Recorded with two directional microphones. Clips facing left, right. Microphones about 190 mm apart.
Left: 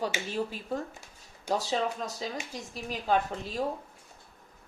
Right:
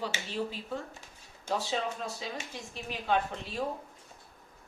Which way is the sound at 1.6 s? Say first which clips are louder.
Left 3 dB; 40° left (ahead or behind).